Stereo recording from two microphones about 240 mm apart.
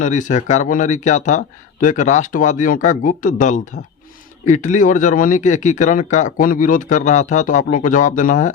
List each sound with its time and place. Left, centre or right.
0.0 s speech: left